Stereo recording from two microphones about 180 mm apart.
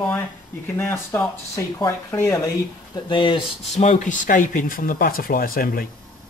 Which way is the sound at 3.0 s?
25° left (ahead or behind).